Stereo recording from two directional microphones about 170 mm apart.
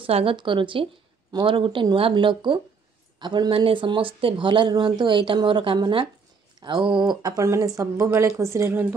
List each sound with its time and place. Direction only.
0.0 s speech: 30° right (ahead or behind); by 8.8 s 15° right (ahead or behind)